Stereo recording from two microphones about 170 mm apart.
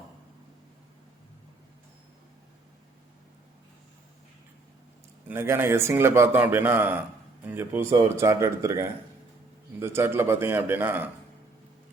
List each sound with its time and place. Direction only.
5.3 s a man's voice: 15° right (ahead or behind)